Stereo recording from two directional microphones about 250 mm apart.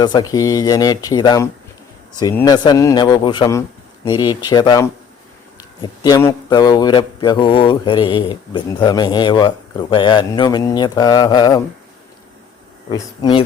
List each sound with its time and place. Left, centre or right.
0.0 s speech: centre
12.9 s speech: centre